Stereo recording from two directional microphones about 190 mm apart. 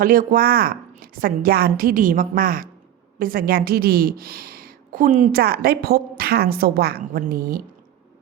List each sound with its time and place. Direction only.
0.0 s a woman's voice: 45° right (ahead or behind)